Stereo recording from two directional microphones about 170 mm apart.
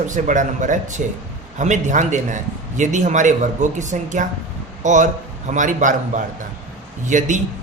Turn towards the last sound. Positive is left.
turn(degrees=-45)  # may be behind; listen again after turning